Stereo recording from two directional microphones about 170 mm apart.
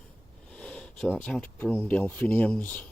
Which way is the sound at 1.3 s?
10° left (ahead or behind).